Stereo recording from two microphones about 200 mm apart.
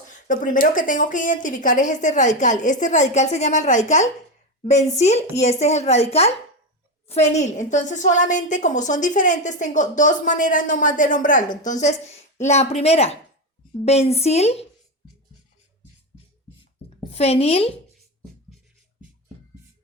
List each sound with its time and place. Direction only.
0.1 s a woman's voice: 40° left (ahead or behind)
17.0 s a woman's voice: 30° left (ahead or behind)